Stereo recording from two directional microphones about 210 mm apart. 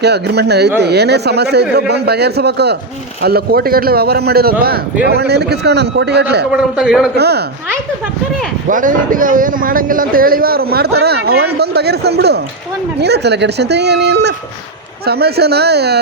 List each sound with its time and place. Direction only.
0.0 s a man's voice: 50° right (ahead or behind)
6.5 s a man's voice: 5° right (ahead or behind)
7.2 s a man's voice: 50° right (ahead or behind)
8.7 s a man's voice: 40° right (ahead or behind)